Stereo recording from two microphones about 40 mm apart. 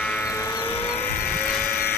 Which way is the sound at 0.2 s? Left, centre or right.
Left.